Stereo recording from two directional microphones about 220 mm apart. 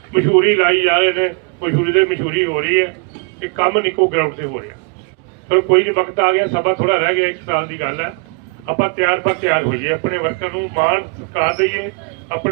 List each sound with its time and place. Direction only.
0.1 s a man's voice: 55° right (ahead or behind)